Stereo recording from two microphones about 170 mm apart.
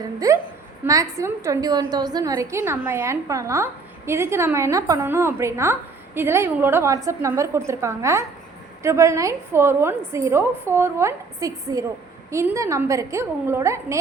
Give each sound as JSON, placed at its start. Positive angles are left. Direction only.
{"t": 0.2, "sound": "a woman's voice", "side_deg": -20}